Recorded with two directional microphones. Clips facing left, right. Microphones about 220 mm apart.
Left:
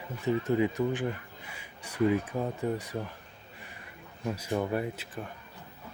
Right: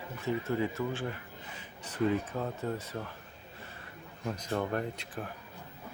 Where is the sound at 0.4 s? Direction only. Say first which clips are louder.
Left 5 dB; 15° left (ahead or behind).